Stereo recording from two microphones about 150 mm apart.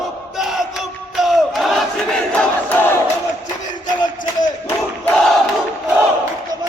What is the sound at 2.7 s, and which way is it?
Battle cry, 15° left (ahead or behind).